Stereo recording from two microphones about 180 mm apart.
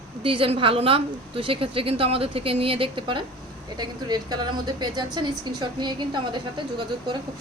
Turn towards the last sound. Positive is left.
turn(degrees=-25)  # may be behind; listen again after turning